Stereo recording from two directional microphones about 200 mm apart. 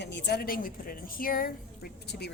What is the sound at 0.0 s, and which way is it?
A woman's voice, 60° left (ahead or behind).